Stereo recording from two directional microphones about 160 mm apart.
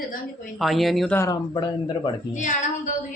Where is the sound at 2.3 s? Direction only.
50° left (ahead or behind).